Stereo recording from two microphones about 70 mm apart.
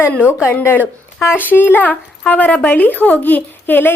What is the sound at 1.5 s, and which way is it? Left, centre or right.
Speech, left.